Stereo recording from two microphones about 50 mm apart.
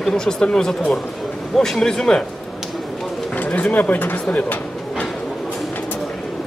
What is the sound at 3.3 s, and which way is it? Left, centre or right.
Speech, left.